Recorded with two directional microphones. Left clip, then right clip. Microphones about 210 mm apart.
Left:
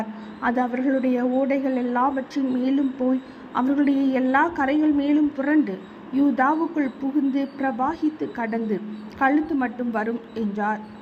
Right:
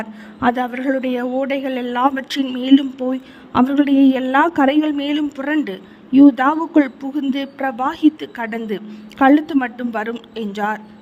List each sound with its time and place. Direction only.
0.0 s a woman's voice: 45° right (ahead or behind)